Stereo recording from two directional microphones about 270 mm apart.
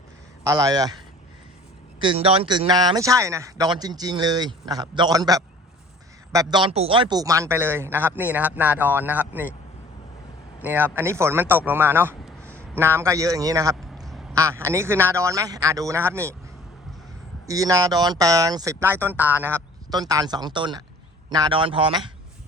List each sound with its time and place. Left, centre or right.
0.4 s speech: centre
2.0 s speech: centre
10.6 s a man's voice: centre
17.4 s speech: centre